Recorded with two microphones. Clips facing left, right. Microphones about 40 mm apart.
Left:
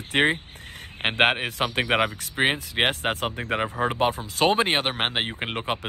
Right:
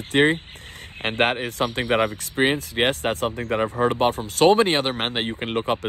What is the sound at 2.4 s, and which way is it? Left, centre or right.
Speech, centre.